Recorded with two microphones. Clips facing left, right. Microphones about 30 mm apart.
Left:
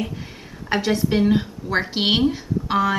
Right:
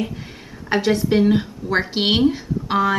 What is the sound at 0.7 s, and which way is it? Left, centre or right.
A woman's voice, centre.